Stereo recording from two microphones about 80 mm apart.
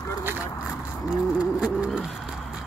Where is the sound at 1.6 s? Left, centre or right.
Centre.